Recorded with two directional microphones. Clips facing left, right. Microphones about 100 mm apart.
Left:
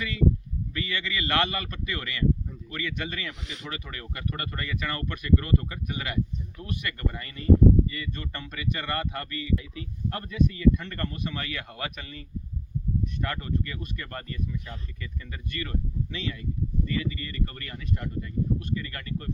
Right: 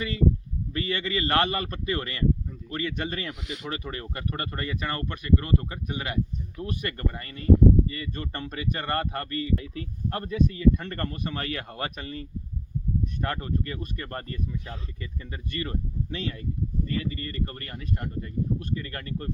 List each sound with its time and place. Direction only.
0.0 s speech: 35° right (ahead or behind)
3.4 s speech: 5° right (ahead or behind)
3.7 s speech: 30° right (ahead or behind)
13.2 s speech: 35° right (ahead or behind)